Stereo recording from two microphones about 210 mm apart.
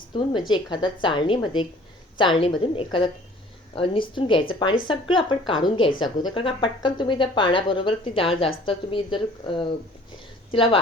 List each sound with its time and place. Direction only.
0.1 s speech: 20° left (ahead or behind)